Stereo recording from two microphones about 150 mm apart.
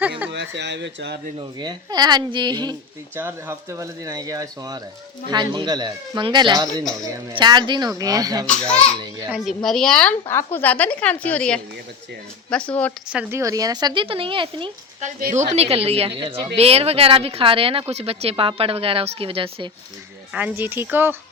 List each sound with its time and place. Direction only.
1.4 s speech: 30° right (ahead or behind)
3.2 s speech: 15° right (ahead or behind)
8.4 s a woman's voice: 5° left (ahead or behind)
9.0 s speech: 25° right (ahead or behind)
9.6 s a woman's voice: 5° left (ahead or behind)
13.1 s speech: 20° right (ahead or behind); by 14.7 s 35° right (ahead or behind)
15.2 s a woman's voice: 55° right (ahead or behind); by 19.7 s 35° right (ahead or behind)
20.3 s speech: 10° right (ahead or behind)